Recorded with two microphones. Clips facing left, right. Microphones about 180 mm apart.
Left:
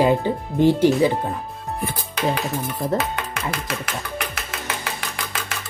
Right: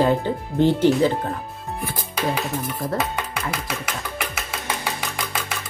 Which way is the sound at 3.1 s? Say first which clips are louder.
Even; 5° right (ahead or behind).